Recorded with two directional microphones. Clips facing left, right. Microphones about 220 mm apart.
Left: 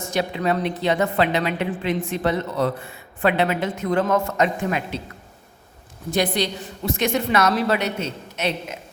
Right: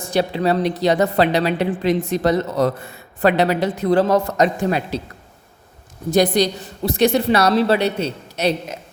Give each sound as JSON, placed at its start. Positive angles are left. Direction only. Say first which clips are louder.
{"t": 0.0, "sound": "a woman's voice", "louder": "right 4 dB", "side_deg": -35}
{"t": 6.1, "sound": "a woman's voice", "louder": "right 6 dB", "side_deg": -40}